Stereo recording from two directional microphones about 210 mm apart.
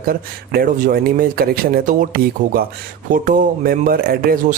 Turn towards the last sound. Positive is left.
turn(degrees=-45)  # may be behind; listen again after turning